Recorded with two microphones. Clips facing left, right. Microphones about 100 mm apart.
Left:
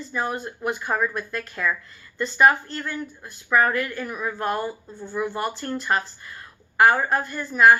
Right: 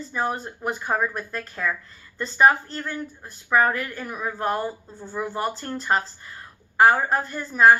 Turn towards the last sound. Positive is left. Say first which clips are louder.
# even
turn(degrees=-35)  # may be behind; listen again after turning